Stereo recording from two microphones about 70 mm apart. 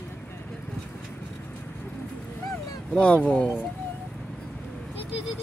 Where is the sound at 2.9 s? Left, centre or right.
Centre.